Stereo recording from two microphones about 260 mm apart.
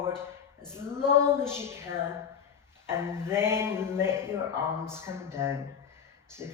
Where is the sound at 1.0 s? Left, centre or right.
Centre.